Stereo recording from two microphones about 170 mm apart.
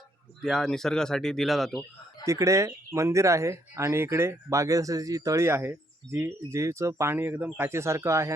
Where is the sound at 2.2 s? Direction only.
20° right (ahead or behind).